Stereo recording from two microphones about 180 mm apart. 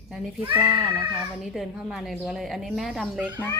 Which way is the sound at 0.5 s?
10° right (ahead or behind).